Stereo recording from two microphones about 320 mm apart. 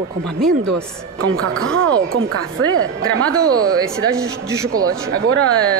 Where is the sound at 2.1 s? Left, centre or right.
Right.